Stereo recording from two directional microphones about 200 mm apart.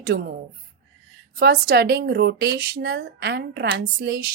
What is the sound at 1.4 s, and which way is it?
Speech, 50° right (ahead or behind).